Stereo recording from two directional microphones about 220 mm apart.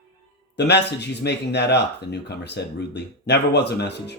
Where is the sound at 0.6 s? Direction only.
50° left (ahead or behind).